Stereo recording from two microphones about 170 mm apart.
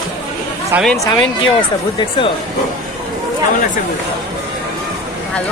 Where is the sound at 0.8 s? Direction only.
Centre (ahead or behind).